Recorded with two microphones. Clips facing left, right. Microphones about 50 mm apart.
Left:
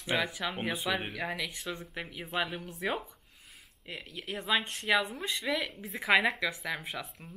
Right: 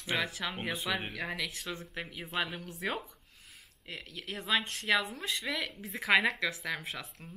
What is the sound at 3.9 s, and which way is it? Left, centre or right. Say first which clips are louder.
Speech: left 2 dB; centre.